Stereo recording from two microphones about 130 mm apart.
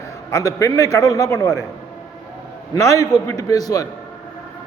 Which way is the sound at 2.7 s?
25° left (ahead or behind).